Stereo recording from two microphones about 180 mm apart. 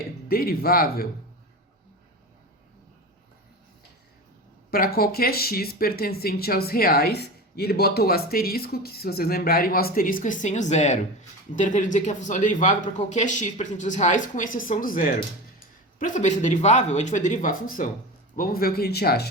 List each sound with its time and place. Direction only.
0.3 s speech: 55° left (ahead or behind)
4.7 s speech: 55° left (ahead or behind)